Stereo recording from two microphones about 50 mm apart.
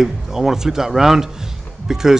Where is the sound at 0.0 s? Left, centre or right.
Centre.